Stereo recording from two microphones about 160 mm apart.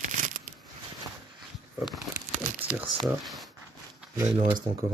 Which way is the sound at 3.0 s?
Centre (ahead or behind).